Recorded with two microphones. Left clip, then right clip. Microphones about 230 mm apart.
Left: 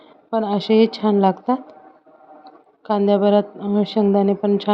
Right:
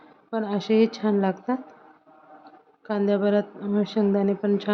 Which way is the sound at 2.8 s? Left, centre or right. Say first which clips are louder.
Left 7 dB; centre.